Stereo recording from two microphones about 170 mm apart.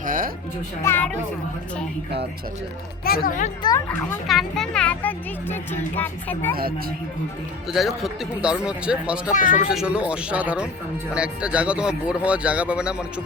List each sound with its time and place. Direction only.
0.0 s children playing: 55° right (ahead or behind)
0.8 s speech: 10° left (ahead or behind)
3.0 s speech: 60° left (ahead or behind)
4.3 s speech: centre (ahead or behind)
7.7 s speech: centre (ahead or behind)
9.3 s speech: 50° left (ahead or behind)
9.6 s speech: 5° right (ahead or behind)